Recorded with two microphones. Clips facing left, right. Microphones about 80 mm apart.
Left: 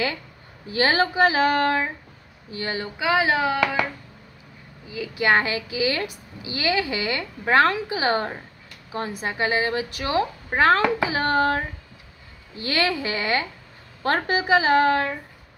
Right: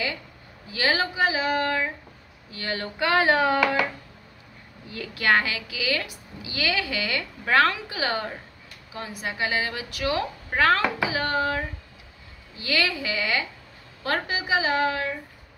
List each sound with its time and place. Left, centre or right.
0.7 s speech: left
2.5 s a woman's voice: left
2.8 s a sound: centre
4.8 s a sound: centre
5.1 s a woman's voice: left
12.5 s a woman's voice: left